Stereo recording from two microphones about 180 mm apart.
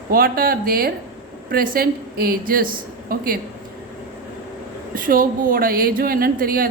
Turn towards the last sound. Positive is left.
turn(degrees=-55)  # may be behind; listen again after turning